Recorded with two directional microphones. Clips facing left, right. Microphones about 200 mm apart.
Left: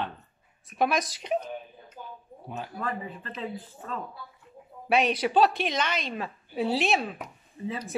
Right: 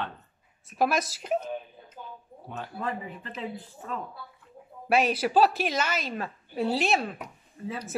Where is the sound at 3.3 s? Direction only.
10° right (ahead or behind).